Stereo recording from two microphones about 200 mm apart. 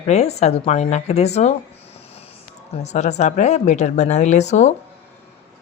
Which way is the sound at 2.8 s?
35° left (ahead or behind).